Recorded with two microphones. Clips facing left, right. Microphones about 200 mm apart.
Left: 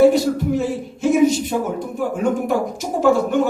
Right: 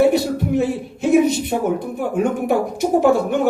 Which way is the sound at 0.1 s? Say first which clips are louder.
Left 1 dB; 60° right (ahead or behind).